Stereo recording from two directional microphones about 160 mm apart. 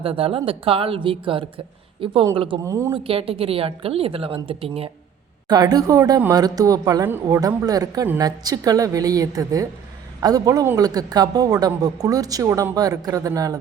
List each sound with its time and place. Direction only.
0.0 s speech: 35° right (ahead or behind)
2.6 s speech: 15° right (ahead or behind)
2.9 s speech: 35° right (ahead or behind)
5.5 s a man's voice: 25° right (ahead or behind)